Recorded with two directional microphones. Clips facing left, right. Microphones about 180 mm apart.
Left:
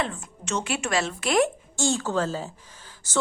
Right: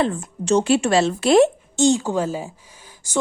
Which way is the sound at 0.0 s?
35° right (ahead or behind).